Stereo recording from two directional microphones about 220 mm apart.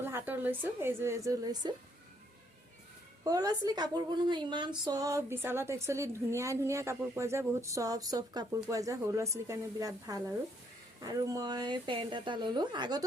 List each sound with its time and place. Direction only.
0.0 s a woman's voice: 10° right (ahead or behind)
3.2 s a woman's voice: 15° right (ahead or behind)